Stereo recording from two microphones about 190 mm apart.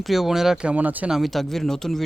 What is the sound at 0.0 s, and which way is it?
Speech, centre (ahead or behind).